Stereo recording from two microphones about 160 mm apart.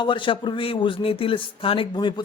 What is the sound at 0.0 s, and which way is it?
Speech, 30° left (ahead or behind).